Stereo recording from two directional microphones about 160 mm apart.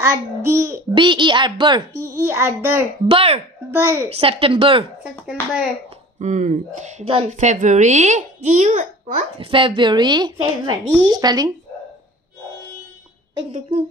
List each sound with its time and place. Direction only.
0.0 s a child's voice: 15° right (ahead or behind)
0.9 s a woman's voice: 30° right (ahead or behind)
2.0 s a child's voice: 15° right (ahead or behind)
3.1 s speech: 35° right (ahead or behind)
3.7 s a child's voice: 15° right (ahead or behind)
4.1 s speech: 35° right (ahead or behind)
5.2 s a child's voice: 5° right (ahead or behind)
6.1 s speech: 50° right (ahead or behind)
9.5 s a woman's voice: 30° right (ahead or behind)